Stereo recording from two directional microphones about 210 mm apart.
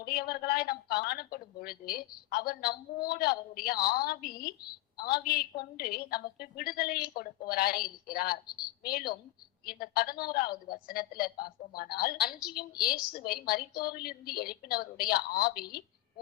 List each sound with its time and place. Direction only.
0.0 s a woman's voice: 45° left (ahead or behind)
8.4 s a woman's voice: 20° left (ahead or behind)
8.8 s a woman's voice: 45° left (ahead or behind)